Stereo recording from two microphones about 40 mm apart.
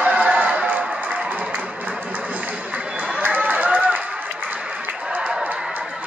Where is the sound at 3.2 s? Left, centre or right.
Right.